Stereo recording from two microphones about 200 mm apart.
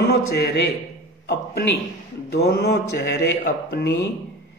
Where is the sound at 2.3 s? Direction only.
55° left (ahead or behind).